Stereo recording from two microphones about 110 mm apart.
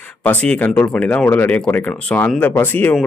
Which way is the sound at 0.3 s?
15° left (ahead or behind).